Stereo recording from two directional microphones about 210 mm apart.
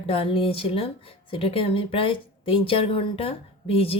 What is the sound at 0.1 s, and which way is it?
Speech, 25° left (ahead or behind).